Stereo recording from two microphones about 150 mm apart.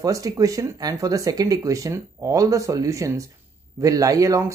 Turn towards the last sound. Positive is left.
turn(degrees=-20)  # may be behind; listen again after turning